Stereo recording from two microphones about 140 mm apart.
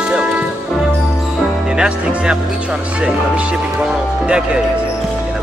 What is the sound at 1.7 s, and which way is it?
Speech, 5° right (ahead or behind).